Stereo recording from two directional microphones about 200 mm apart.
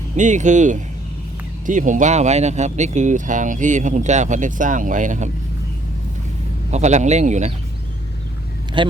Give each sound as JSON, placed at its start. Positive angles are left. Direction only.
{"t": 0.2, "sound": "speech", "side_deg": -40}
{"t": 6.7, "sound": "speech", "side_deg": -35}
{"t": 8.8, "sound": "speech", "side_deg": -25}